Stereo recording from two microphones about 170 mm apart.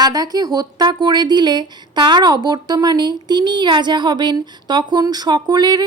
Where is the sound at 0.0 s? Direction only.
20° right (ahead or behind).